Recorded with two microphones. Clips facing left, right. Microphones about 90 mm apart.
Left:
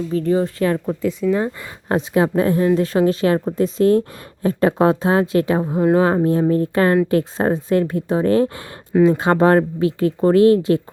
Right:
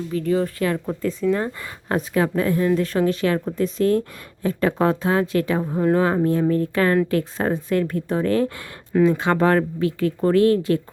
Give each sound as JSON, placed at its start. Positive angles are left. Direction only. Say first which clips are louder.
{"t": 0.1, "sound": "speech", "louder": "left 2 dB", "side_deg": 30}
{"t": 0.9, "sound": "speech", "louder": "left 2 dB", "side_deg": 5}
{"t": 1.5, "sound": "speech", "louder": "left 3 dB", "side_deg": 25}
{"t": 5.6, "sound": "speech", "louder": "left 3 dB", "side_deg": 15}
{"t": 6.1, "sound": "speech", "louder": "left 3 dB", "side_deg": 30}